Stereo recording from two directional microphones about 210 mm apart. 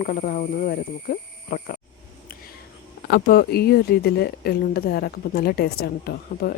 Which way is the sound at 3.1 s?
50° left (ahead or behind).